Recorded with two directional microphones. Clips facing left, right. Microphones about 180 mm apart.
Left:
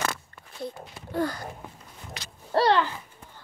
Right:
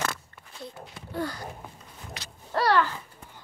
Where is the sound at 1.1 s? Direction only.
45° left (ahead or behind).